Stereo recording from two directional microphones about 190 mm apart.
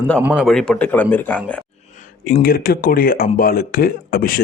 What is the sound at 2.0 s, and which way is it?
Speech, 45° left (ahead or behind).